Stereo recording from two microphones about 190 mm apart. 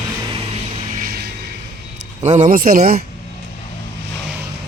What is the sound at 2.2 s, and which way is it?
Speech, 40° right (ahead or behind).